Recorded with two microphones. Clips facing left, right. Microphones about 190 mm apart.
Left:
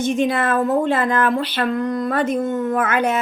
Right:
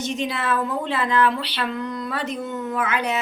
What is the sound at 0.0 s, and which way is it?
Speech, 50° left (ahead or behind).